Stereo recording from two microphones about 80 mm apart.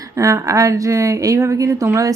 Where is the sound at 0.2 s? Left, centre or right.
Right.